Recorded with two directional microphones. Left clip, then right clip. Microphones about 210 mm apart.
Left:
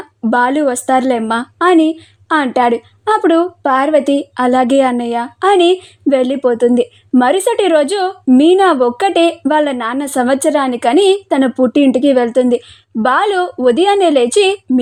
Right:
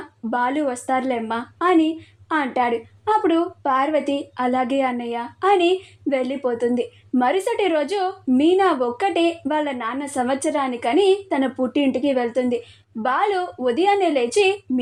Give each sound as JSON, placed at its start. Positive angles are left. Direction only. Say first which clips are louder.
{"t": 0.3, "sound": "a woman's voice", "louder": "left 9 dB", "side_deg": 50}